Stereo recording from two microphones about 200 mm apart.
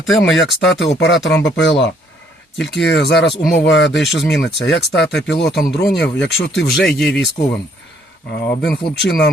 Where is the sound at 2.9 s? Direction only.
60° left (ahead or behind).